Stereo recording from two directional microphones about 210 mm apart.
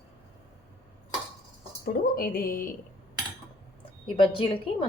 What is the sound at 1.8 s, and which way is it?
Speech, 45° left (ahead or behind).